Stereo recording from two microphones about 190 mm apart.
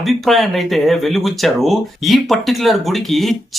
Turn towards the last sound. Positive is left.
turn(degrees=0)  # may be behind; listen again after turning